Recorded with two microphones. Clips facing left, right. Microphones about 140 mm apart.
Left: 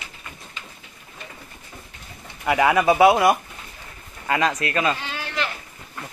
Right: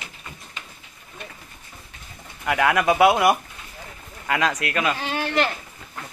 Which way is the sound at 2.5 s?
5° left (ahead or behind).